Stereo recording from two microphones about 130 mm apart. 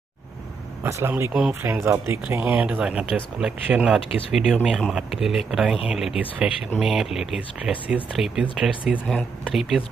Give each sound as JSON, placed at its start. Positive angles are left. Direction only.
{"t": 0.8, "sound": "speech", "side_deg": -20}